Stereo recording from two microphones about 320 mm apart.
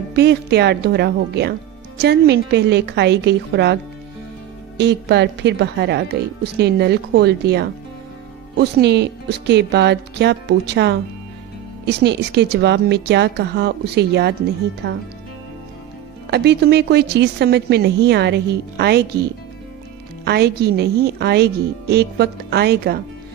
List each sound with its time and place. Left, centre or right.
0.1 s speech: right
4.7 s speech: right
16.3 s speech: right
20.2 s speech: right